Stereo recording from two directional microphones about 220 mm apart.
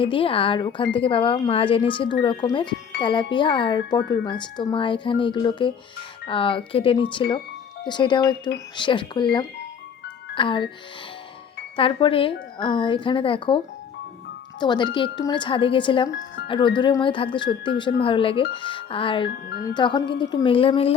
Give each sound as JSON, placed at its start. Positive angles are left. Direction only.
{"t": 0.0, "sound": "speech", "side_deg": 25}
{"t": 10.3, "sound": "speech", "side_deg": 20}
{"t": 11.8, "sound": "speech", "side_deg": 25}
{"t": 14.6, "sound": "speech", "side_deg": 20}